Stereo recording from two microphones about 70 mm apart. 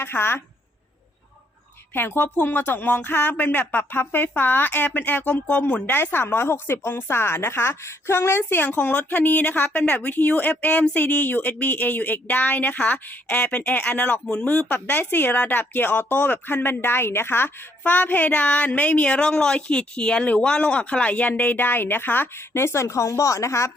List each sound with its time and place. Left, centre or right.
0.0 s a woman's voice: left
1.9 s speech: left